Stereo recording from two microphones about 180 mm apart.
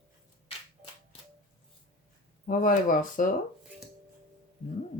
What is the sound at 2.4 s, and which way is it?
Speech, 50° left (ahead or behind).